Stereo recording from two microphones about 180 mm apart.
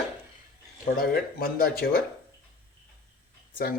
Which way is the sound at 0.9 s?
55° left (ahead or behind).